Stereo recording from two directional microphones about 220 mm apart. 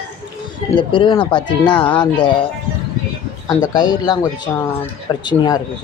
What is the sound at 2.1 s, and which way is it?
Speech, 20° left (ahead or behind).